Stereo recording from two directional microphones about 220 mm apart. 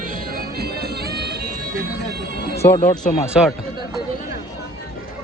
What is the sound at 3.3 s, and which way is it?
Speech, centre (ahead or behind).